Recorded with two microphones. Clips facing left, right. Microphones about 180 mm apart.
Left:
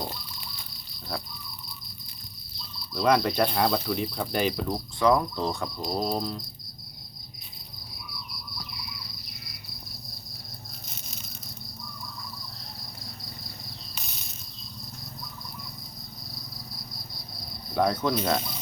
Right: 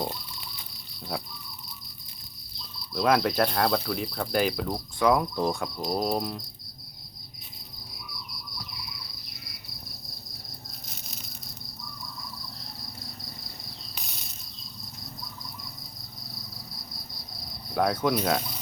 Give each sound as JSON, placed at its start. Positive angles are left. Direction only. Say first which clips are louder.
{"t": 2.9, "sound": "cricket", "louder": "even", "side_deg": 0}
{"t": 17.7, "sound": "cricket", "louder": "even", "side_deg": -5}